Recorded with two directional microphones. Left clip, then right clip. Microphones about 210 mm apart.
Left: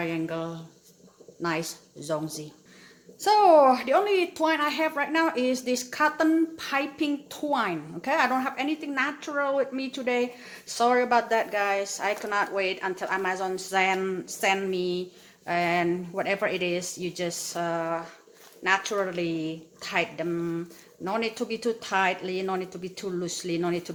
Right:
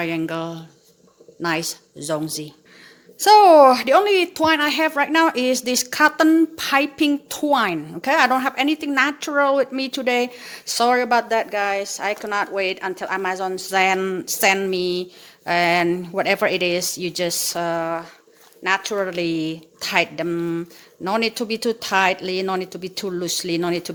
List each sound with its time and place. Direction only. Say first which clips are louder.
0.0 s a woman's voice: right 6 dB; 45° right (ahead or behind)